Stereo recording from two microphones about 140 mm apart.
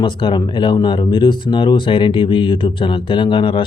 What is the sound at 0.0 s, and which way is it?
Speech, 35° left (ahead or behind).